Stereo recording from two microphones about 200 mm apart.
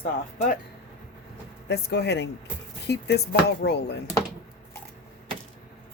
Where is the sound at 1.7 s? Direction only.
55° left (ahead or behind).